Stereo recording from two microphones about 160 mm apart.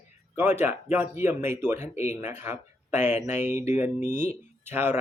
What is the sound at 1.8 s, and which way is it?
Speech, 45° left (ahead or behind).